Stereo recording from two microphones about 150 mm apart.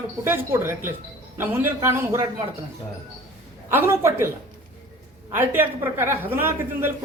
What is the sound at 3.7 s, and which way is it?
Speech, 15° right (ahead or behind).